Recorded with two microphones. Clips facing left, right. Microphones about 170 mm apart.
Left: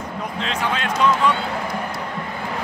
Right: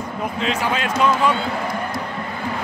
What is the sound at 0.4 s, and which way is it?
Speech, 5° right (ahead or behind).